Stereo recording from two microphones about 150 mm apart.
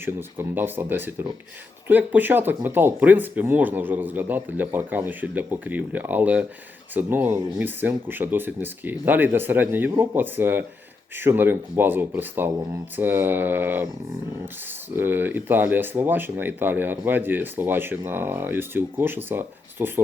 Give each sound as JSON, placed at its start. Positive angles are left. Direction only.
{"t": 0.0, "sound": "speech", "side_deg": -15}
{"t": 14.9, "sound": "speech", "side_deg": -15}